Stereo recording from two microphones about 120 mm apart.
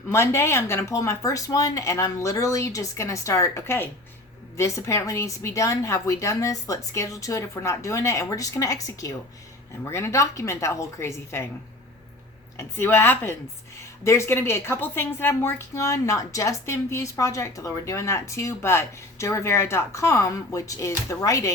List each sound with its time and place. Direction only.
0.1 s a woman's voice: 20° left (ahead or behind)
12.5 s a woman's voice: 20° left (ahead or behind)